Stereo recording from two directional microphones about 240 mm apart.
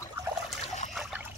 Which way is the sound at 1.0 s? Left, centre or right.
Centre.